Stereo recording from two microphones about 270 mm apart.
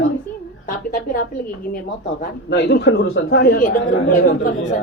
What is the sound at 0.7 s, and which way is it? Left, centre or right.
Speech, left.